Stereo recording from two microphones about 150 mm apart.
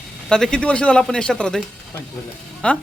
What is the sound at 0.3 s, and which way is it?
Speech, 5° left (ahead or behind).